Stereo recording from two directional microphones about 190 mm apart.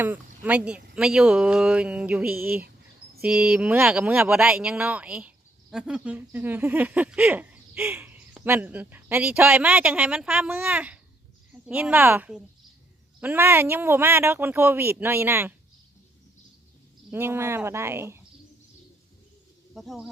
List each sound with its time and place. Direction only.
0.0 s speech: 10° right (ahead or behind)
2.3 s speech: 50° right (ahead or behind)
3.2 s speech: 5° right (ahead or behind)
17.1 s speech: 10° right (ahead or behind)
19.7 s speech: centre (ahead or behind)